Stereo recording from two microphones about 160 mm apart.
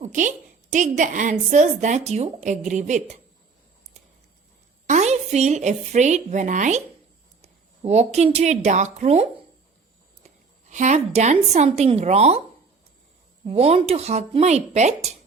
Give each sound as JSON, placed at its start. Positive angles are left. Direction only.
{"t": 0.0, "sound": "a woman's voice", "side_deg": -50}
{"t": 4.9, "sound": "a woman's voice", "side_deg": -45}
{"t": 10.7, "sound": "a woman's voice", "side_deg": -50}
{"t": 13.4, "sound": "speech", "side_deg": -40}